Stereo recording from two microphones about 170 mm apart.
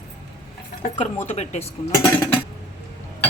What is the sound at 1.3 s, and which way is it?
Speech, 40° left (ahead or behind).